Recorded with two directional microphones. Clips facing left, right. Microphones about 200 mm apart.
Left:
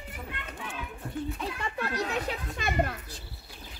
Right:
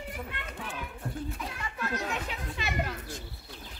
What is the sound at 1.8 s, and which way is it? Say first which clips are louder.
Chatter: left 2 dB; 35° left (ahead or behind).